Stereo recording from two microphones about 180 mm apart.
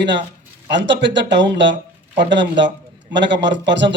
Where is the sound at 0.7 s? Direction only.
80° right.